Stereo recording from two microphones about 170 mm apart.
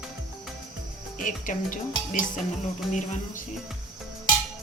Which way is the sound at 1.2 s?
50° left (ahead or behind).